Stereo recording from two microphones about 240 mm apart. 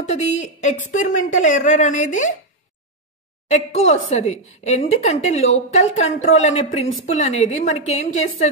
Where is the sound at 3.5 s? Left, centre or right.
Left.